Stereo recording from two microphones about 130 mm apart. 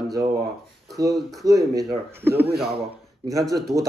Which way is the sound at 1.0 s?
25° right (ahead or behind).